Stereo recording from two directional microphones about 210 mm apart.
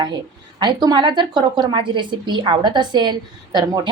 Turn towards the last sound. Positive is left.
turn(degrees=-20)  # may be behind; listen again after turning